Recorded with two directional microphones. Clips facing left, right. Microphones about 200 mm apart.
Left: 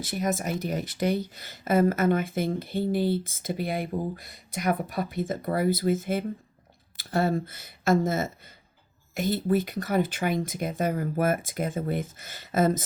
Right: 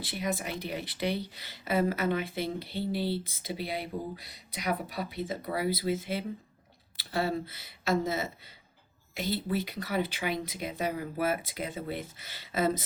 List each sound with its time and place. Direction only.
0.0 s speech: 45° left (ahead or behind)